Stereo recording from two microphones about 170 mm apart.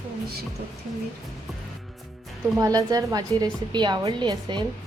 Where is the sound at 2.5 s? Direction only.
20° right (ahead or behind).